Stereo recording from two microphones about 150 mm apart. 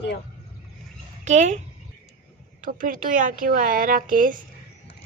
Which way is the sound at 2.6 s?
65° right (ahead or behind).